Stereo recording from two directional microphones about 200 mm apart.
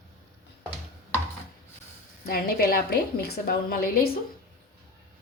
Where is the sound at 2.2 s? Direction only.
50° left (ahead or behind).